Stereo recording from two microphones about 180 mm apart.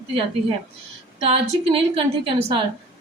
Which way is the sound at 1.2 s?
35° right (ahead or behind).